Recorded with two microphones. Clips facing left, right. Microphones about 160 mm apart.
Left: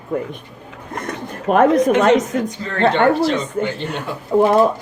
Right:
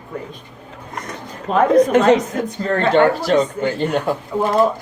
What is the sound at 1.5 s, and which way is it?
Speech, 60° left (ahead or behind).